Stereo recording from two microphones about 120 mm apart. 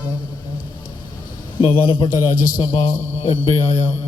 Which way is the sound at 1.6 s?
45° left (ahead or behind).